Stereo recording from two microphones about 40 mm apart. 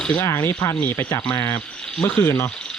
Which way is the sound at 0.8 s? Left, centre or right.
Left.